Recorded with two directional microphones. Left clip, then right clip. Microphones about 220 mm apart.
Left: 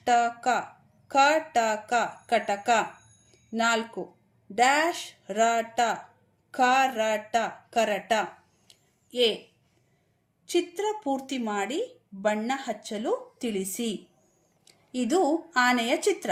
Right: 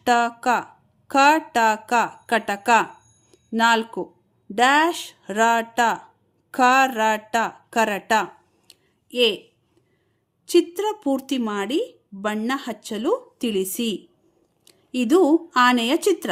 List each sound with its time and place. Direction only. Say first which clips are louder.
0.0 s speech: right 4 dB; 50° right (ahead or behind)
8.7 s a sound: right 5 dB; 50° right (ahead or behind)
10.5 s speech: right 7 dB; 55° right (ahead or behind)